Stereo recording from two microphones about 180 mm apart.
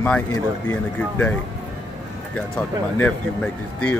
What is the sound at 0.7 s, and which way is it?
Speech, 5° left (ahead or behind).